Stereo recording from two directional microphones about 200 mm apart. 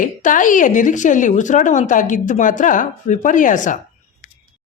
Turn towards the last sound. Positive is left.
turn(degrees=40)  # may be behind; listen again after turning